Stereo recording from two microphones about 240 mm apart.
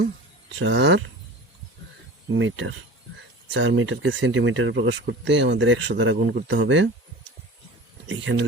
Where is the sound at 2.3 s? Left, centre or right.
Right.